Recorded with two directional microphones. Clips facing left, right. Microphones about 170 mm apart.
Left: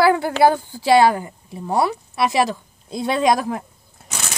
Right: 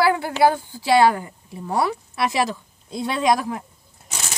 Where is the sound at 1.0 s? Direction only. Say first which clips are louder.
Right 1 dB; 20° left (ahead or behind).